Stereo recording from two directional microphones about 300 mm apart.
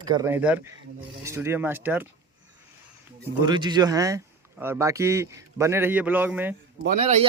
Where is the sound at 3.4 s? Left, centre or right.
Centre.